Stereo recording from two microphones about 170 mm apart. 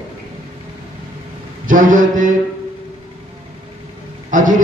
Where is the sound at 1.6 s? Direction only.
50° right (ahead or behind).